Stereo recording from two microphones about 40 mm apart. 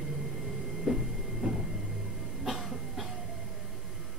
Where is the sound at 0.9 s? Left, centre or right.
Centre.